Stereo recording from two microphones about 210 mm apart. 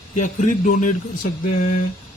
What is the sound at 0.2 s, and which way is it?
Speech, 40° left (ahead or behind).